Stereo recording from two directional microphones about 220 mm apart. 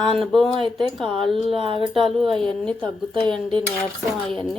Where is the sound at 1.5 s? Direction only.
25° right (ahead or behind).